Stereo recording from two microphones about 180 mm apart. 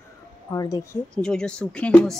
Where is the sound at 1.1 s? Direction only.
5° left (ahead or behind).